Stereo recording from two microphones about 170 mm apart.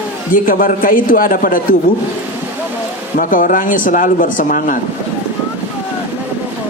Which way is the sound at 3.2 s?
50° left (ahead or behind).